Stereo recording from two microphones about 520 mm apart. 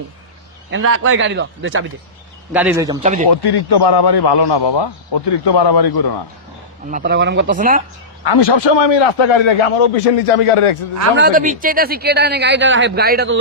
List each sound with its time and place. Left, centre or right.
0.7 s a man's voice: right
2.5 s a man's voice: centre
3.2 s a man's voice: left
6.9 s a man's voice: centre
8.2 s a man's voice: left
11.2 s a man's voice: centre